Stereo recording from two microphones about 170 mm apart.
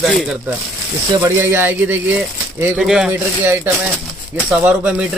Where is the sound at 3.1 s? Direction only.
15° right (ahead or behind).